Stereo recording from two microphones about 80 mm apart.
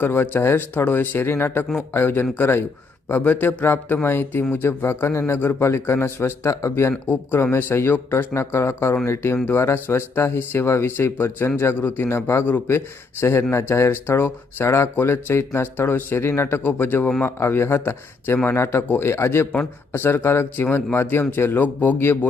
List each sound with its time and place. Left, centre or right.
0.0 s speech: left